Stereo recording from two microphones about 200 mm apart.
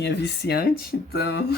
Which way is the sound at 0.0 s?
55° left (ahead or behind).